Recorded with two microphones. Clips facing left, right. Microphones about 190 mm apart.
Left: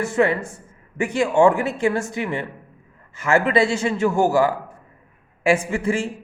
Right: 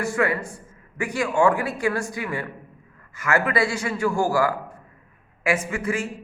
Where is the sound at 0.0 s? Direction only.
25° left (ahead or behind).